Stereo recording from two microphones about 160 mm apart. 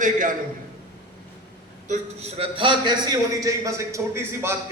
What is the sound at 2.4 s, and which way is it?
A man's voice, 30° right (ahead or behind).